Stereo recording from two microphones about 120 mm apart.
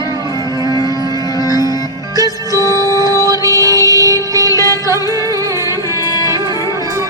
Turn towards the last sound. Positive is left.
turn(degrees=30)  # may be behind; listen again after turning